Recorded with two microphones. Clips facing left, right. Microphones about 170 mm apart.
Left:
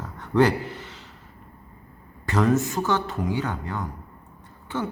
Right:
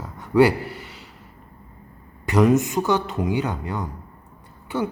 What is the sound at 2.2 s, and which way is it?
Speech, 15° right (ahead or behind).